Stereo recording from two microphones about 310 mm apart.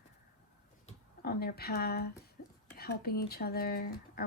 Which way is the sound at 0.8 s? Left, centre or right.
Left.